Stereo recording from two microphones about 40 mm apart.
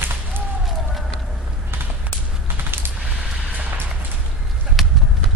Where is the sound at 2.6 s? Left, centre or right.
Right.